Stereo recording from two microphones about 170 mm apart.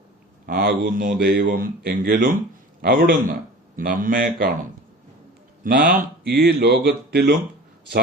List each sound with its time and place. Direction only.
0.4 s speech: 55° right (ahead or behind)
5.6 s speech: 60° right (ahead or behind)